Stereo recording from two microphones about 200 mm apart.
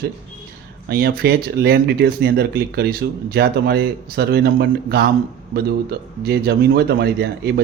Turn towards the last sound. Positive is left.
turn(degrees=-55)  # may be behind; listen again after turning